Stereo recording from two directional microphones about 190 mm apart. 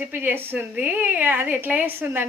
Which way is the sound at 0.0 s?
10° right (ahead or behind).